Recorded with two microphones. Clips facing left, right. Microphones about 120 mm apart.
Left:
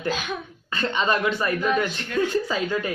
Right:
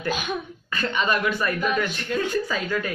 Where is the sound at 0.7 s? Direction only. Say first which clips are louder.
Left 1 dB; 25° left (ahead or behind).